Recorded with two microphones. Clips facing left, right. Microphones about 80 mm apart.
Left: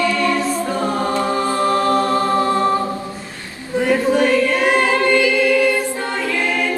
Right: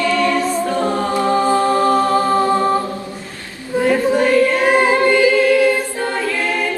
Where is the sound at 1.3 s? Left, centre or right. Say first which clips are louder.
Right 5 dB; centre.